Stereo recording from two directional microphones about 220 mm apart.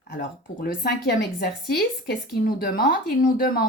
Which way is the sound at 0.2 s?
40° left (ahead or behind).